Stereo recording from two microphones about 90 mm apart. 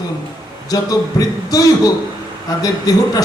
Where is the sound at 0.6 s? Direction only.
40° left (ahead or behind).